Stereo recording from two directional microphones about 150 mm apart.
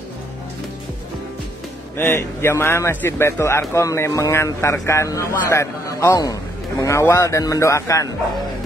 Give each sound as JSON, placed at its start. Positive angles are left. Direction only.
{"t": 2.0, "sound": "a man's voice", "side_deg": 15}